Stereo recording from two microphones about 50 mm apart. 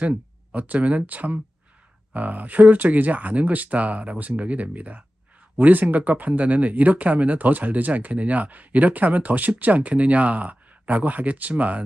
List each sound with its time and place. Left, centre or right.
0.0 s speech: right